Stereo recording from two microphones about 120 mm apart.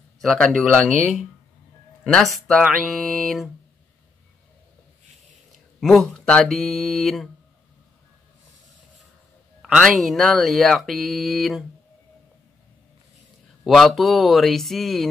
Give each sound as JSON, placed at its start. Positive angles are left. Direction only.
{"t": 0.2, "sound": "speech", "side_deg": 0}
{"t": 2.1, "sound": "speech", "side_deg": 0}
{"t": 5.8, "sound": "speech", "side_deg": 0}
{"t": 9.6, "sound": "speech", "side_deg": 0}
{"t": 13.7, "sound": "speech", "side_deg": 0}